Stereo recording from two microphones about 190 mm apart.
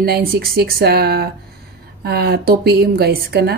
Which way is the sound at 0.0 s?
55° right (ahead or behind).